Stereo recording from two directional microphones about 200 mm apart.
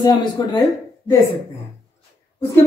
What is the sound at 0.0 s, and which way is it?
Speech, 20° left (ahead or behind).